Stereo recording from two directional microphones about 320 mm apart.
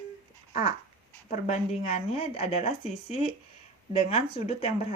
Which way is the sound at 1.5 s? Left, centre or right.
Left.